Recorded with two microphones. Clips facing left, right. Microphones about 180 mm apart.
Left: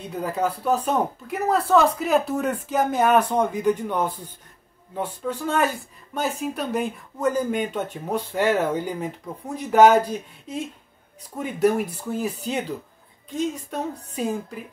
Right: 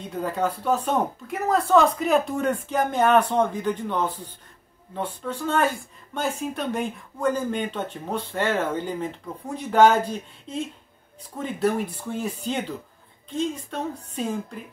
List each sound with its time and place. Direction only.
0.2 s speech: 10° left (ahead or behind)